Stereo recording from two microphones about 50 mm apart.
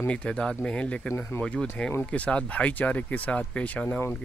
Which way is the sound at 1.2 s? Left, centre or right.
Left.